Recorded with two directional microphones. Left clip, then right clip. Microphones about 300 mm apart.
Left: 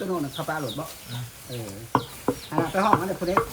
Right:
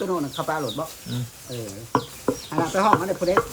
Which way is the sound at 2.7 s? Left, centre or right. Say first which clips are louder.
Right 3 dB; centre.